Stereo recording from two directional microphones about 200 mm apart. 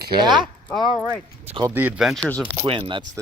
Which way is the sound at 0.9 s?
10° right (ahead or behind).